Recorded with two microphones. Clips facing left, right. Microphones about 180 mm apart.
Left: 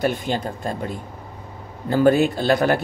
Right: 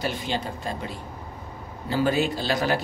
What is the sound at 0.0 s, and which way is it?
Speech, 50° left (ahead or behind).